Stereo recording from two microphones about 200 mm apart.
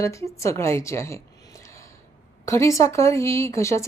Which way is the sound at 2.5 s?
15° left (ahead or behind).